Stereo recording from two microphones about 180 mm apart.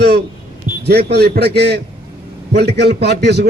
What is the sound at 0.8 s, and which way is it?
A man's voice, 65° right (ahead or behind).